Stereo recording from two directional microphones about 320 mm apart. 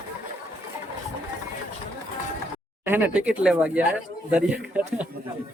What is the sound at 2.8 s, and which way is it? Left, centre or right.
Speech, centre.